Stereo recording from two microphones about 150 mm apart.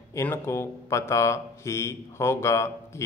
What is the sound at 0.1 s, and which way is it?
A man's voice, 20° left (ahead or behind).